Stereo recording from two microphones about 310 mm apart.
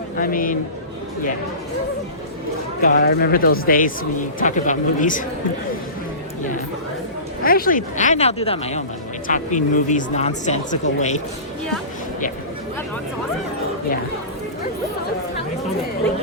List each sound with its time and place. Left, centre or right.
0.2 s speech: left
2.8 s speech: left
7.4 s speech: left